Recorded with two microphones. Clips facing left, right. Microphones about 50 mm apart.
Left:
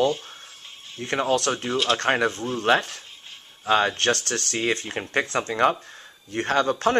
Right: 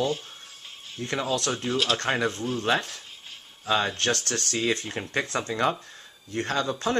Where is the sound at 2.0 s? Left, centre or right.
Left.